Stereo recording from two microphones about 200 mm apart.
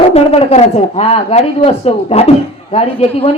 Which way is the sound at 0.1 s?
30° left (ahead or behind).